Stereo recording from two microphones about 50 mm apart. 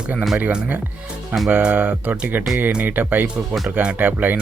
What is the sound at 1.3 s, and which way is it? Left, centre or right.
Speech, right.